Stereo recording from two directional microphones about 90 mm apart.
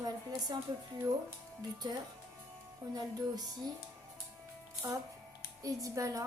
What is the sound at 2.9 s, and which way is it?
Speech, 45° right (ahead or behind).